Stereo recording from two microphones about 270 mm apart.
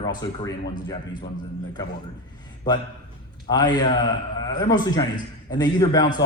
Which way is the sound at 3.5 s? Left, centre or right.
Centre.